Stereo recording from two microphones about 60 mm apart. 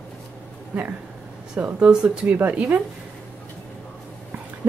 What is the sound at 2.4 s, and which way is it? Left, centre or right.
Speech, right.